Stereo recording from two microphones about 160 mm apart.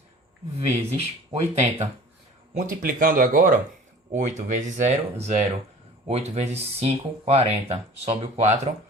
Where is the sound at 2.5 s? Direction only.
55° right (ahead or behind).